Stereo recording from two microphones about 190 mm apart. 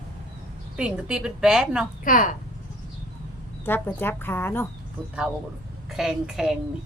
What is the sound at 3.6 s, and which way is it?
A woman's voice, 10° left (ahead or behind).